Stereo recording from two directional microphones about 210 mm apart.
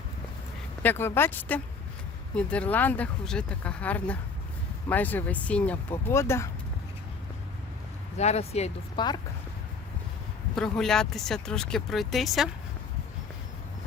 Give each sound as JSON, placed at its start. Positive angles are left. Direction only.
{"t": 0.8, "sound": "speech", "side_deg": 10}
{"t": 8.2, "sound": "speech", "side_deg": 30}
{"t": 10.5, "sound": "speech", "side_deg": 0}